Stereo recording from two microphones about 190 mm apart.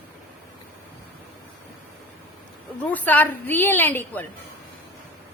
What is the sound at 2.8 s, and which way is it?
A woman's voice, 10° left (ahead or behind).